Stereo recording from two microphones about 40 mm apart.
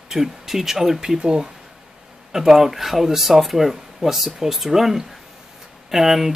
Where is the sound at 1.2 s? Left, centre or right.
Right.